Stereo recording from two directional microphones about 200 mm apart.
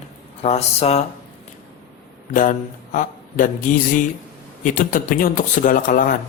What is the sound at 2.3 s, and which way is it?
Mantra, 40° left (ahead or behind).